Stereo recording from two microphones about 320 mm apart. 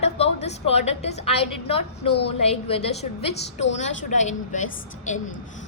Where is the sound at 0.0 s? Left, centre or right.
Centre.